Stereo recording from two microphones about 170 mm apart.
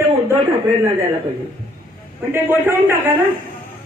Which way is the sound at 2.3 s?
15° right (ahead or behind).